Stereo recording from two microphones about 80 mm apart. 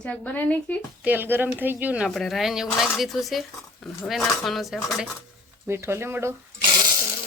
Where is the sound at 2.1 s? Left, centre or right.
Centre.